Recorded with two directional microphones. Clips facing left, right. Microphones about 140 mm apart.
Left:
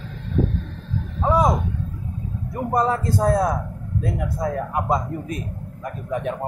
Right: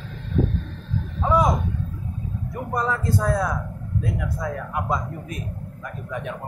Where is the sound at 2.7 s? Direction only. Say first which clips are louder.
Left 4 dB; 35° left (ahead or behind).